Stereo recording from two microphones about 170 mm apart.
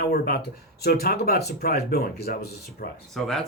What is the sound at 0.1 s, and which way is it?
Speech, 70° left (ahead or behind).